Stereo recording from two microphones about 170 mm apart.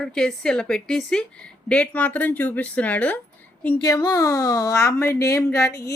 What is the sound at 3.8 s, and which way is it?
Speech, 25° left (ahead or behind).